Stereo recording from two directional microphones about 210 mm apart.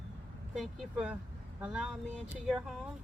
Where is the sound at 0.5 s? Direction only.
Centre (ahead or behind).